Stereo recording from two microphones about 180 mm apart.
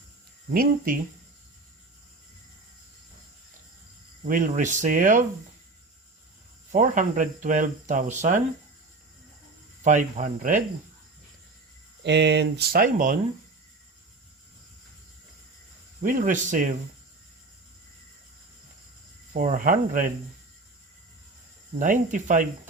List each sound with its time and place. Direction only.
0.5 s speech: 55° right (ahead or behind)
4.2 s speech: 50° right (ahead or behind)
6.7 s speech: 45° right (ahead or behind)
9.8 s speech: 45° right (ahead or behind)
12.0 s speech: 75° right (ahead or behind); by 13.1 s 50° right (ahead or behind)
16.0 s speech: 45° right (ahead or behind)
19.3 s speech: 45° right (ahead or behind)
21.8 s speech: 45° right (ahead or behind)